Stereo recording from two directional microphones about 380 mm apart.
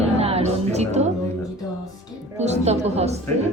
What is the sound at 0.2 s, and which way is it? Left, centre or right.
Music, centre.